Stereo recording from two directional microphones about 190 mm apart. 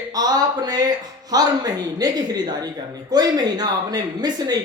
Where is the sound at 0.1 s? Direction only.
20° right (ahead or behind).